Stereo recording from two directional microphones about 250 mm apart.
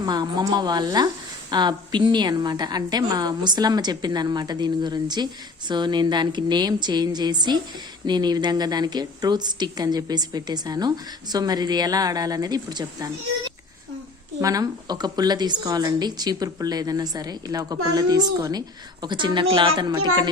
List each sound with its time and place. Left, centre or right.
0.0 s a woman's voice: centre
14.4 s a woman's voice: centre